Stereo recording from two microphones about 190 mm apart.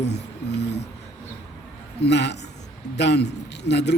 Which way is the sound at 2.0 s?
65° left (ahead or behind).